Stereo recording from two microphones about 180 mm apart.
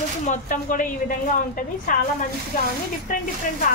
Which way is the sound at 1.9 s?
50° left (ahead or behind).